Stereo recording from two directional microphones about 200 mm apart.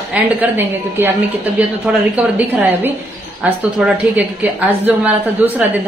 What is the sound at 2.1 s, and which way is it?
A woman's voice, 10° right (ahead or behind).